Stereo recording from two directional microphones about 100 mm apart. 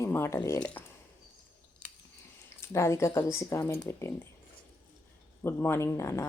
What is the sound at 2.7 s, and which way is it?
Speech, 30° left (ahead or behind).